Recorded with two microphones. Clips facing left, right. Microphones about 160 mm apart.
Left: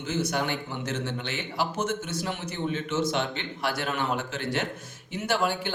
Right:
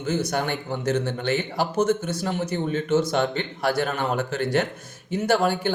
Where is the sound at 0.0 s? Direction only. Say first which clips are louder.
Right 3 dB; 45° right (ahead or behind).